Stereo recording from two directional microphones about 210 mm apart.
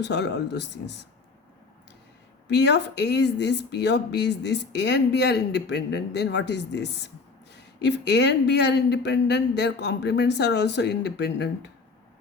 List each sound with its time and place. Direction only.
0.0 s speech: 55° left (ahead or behind)
2.5 s speech: 55° left (ahead or behind)